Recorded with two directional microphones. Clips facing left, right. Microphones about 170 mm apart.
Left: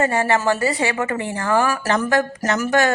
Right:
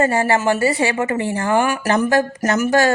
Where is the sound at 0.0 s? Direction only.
30° right (ahead or behind).